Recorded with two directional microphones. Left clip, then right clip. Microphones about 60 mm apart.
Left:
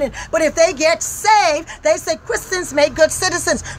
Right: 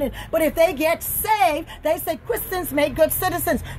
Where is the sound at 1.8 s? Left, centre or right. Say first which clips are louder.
Left 6 dB; centre.